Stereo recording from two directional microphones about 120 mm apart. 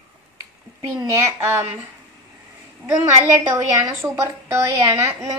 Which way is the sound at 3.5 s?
35° right (ahead or behind).